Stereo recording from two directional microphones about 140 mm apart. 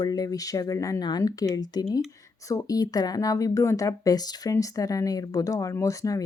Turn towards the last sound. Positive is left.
turn(degrees=25)  # may be behind; listen again after turning